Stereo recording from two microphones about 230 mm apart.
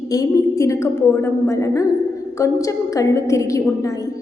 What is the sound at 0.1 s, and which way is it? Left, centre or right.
A woman's voice, centre.